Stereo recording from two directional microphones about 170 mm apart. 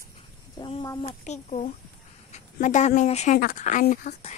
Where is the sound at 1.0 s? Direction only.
40° left (ahead or behind).